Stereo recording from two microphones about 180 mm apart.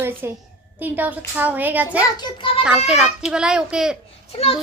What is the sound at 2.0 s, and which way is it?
Speech, 25° left (ahead or behind).